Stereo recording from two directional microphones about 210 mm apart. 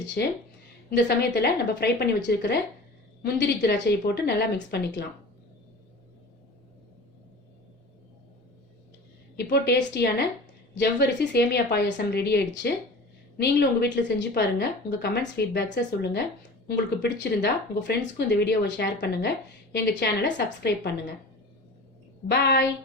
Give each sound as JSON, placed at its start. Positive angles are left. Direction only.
{"t": 0.2, "sound": "speech", "side_deg": 50}
{"t": 9.3, "sound": "a woman's voice", "side_deg": 50}
{"t": 22.3, "sound": "a woman's voice", "side_deg": 55}